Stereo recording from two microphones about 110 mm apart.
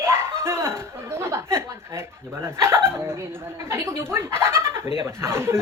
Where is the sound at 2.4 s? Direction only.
25° right (ahead or behind).